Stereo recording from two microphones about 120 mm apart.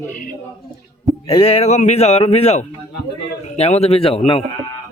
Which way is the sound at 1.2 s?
55° left (ahead or behind).